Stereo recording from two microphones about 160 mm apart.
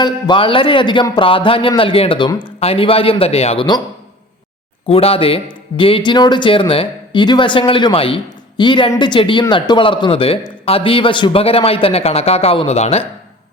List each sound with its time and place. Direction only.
0.0 s speech: 30° left (ahead or behind)
4.9 s speech: 35° left (ahead or behind)